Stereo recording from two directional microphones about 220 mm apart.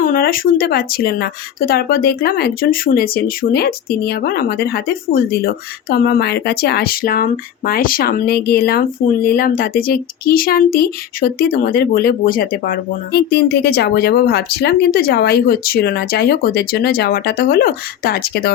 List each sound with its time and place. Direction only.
0.0 s speech: 40° left (ahead or behind)